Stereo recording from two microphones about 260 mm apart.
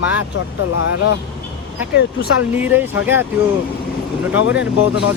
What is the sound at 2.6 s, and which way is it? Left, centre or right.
Speech, centre.